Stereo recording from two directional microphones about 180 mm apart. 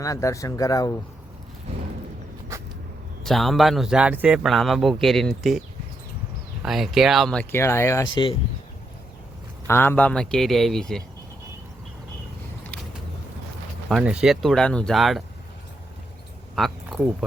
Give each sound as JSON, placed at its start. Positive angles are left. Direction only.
{"t": 0.0, "sound": "speech", "side_deg": 15}
{"t": 3.2, "sound": "a man's voice", "side_deg": 0}
{"t": 9.6, "sound": "a man's voice", "side_deg": 10}
{"t": 13.8, "sound": "a man's voice", "side_deg": -5}
{"t": 16.6, "sound": "speech", "side_deg": 0}